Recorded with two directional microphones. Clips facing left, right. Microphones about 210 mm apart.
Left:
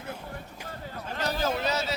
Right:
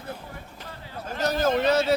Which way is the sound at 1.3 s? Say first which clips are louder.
Right 7 dB; 50° right (ahead or behind).